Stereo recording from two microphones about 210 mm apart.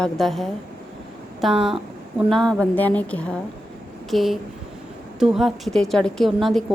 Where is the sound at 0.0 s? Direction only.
Centre (ahead or behind).